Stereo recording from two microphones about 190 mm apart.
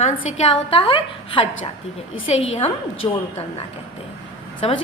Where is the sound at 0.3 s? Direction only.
30° left (ahead or behind).